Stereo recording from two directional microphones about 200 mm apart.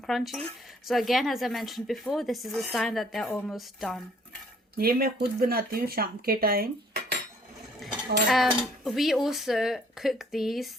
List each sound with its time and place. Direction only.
0.1 s speech: centre (ahead or behind)
4.8 s speech: 50° right (ahead or behind)
8.3 s speech: centre (ahead or behind)